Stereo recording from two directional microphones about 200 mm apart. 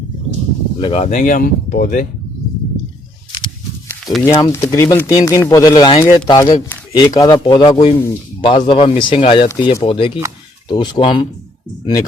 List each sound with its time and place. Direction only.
0.8 s speech: 30° left (ahead or behind)
4.0 s speech: centre (ahead or behind)
4.4 s speech: 15° left (ahead or behind)